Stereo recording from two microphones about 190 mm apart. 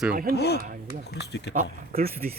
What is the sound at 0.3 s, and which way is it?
Speech, 60° left (ahead or behind).